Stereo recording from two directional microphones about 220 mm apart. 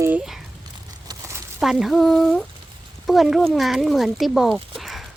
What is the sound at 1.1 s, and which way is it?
Crumpling, 15° right (ahead or behind).